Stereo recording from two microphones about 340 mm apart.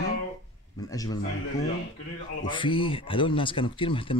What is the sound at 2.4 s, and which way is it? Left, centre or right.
Speech, centre.